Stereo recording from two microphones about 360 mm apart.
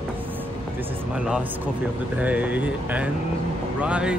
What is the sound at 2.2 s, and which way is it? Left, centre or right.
Speech, centre.